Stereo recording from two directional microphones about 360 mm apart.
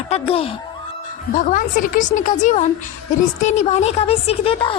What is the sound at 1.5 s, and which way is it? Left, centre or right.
A woman's voice, left.